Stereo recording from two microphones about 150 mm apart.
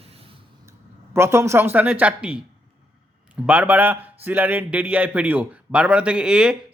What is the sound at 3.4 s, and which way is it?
A man's voice, 10° right (ahead or behind).